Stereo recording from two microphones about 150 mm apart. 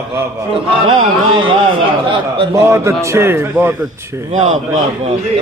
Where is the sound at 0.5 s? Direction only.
35° right (ahead or behind).